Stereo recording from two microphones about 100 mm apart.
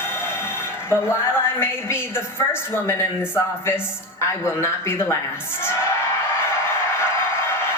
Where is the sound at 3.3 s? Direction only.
25° left (ahead or behind).